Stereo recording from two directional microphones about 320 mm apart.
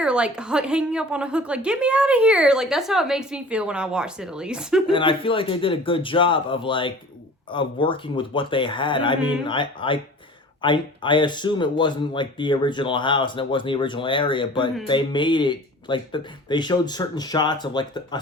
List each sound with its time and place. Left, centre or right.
0.0 s a woman's voice: centre
4.9 s speech: centre